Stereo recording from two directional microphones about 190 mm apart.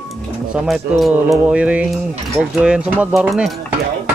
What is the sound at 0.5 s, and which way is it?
Speech, 5° right (ahead or behind).